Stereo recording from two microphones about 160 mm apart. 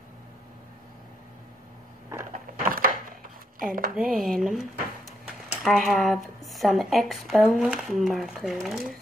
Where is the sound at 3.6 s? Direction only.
60° right (ahead or behind).